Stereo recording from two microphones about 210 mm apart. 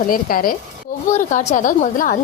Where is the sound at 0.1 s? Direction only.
45° left (ahead or behind).